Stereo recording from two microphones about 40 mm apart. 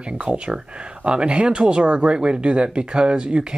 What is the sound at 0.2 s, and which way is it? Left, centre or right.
Speech, right.